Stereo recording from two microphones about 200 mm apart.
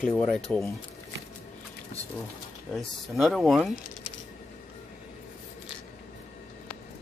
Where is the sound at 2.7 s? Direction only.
Centre (ahead or behind).